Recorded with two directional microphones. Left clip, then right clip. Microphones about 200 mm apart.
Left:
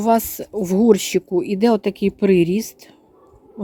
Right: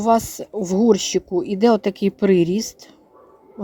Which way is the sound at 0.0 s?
25° left (ahead or behind).